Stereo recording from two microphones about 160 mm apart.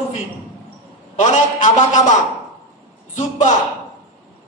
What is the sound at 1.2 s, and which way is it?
Speech, 45° left (ahead or behind).